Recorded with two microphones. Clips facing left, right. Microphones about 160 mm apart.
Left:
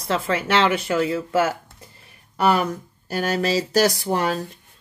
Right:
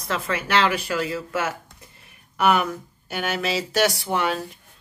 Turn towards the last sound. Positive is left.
turn(degrees=40)  # may be behind; listen again after turning